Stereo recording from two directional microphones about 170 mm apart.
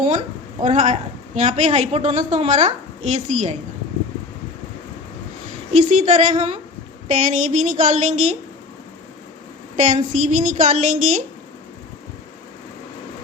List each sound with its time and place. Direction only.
0.0 s a woman's voice: 45° right (ahead or behind)
5.7 s a woman's voice: 45° right (ahead or behind)
9.7 s a woman's voice: 45° right (ahead or behind)